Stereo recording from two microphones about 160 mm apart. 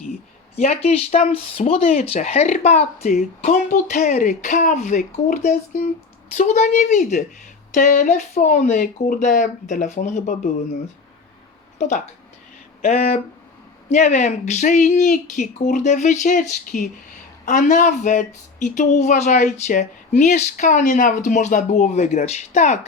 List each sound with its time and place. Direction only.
0.5 s speech: 40° left (ahead or behind)
11.8 s speech: 45° left (ahead or behind)